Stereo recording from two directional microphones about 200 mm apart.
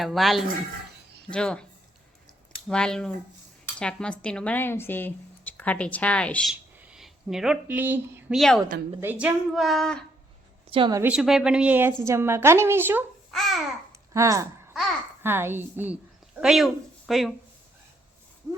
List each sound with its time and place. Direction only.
0.0 s a woman's voice: centre (ahead or behind)
2.6 s a woman's voice: 5° left (ahead or behind)
8.4 s a woman's voice: centre (ahead or behind)
10.7 s a woman's voice: 25° right (ahead or behind)
11.0 s a woman's voice: 5° right (ahead or behind)
13.3 s babbling: centre (ahead or behind)
14.1 s speech: 15° right (ahead or behind)